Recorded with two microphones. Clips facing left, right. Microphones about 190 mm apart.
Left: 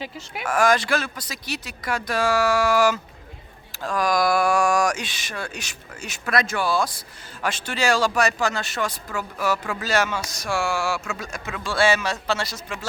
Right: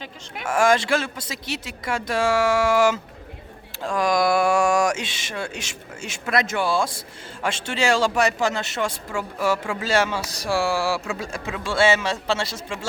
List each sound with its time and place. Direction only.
0.4 s speech: 25° right (ahead or behind)